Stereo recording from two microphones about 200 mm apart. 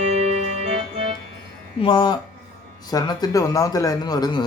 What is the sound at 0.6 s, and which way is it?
Keyboard, 30° right (ahead or behind).